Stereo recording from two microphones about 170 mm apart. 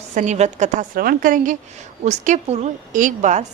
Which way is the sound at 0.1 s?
45° right (ahead or behind).